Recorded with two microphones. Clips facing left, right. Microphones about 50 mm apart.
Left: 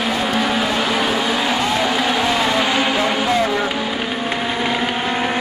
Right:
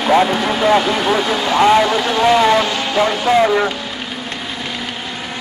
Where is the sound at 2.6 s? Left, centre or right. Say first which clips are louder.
Right 1 dB; centre.